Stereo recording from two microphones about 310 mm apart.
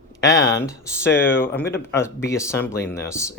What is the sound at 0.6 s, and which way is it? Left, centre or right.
Speech, centre.